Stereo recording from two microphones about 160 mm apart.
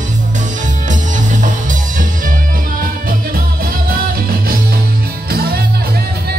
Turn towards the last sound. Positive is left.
turn(degrees=-70)  # may be behind; listen again after turning